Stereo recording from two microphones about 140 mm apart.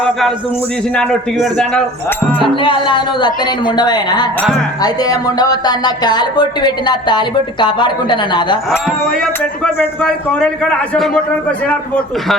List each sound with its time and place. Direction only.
0.0 s a man's voice: centre (ahead or behind)
2.6 s speech: 35° left (ahead or behind)
9.2 s a man's voice: 10° left (ahead or behind)